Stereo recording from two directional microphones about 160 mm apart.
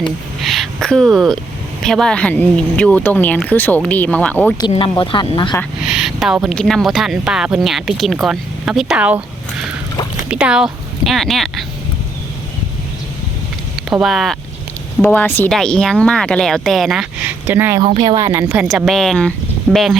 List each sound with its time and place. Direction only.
0.4 s a sound: centre (ahead or behind)
1.8 s speech: 5° left (ahead or behind)
4.7 s speech: 30° left (ahead or behind)
5.8 s speech: 5° right (ahead or behind)
13.9 s speech: centre (ahead or behind)
15.0 s speech: 10° left (ahead or behind); by 17.7 s 15° right (ahead or behind)
18.0 s speech: 25° right (ahead or behind)
18.3 s speech: 10° right (ahead or behind)